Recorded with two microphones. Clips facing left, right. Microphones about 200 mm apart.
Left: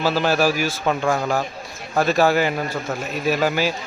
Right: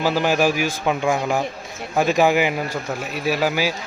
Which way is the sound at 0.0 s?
15° right (ahead or behind).